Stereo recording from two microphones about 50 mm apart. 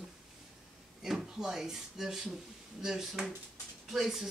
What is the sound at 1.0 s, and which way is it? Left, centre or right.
Speech, centre.